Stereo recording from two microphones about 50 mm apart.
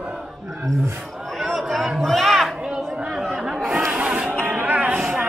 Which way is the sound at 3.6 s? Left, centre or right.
Centre.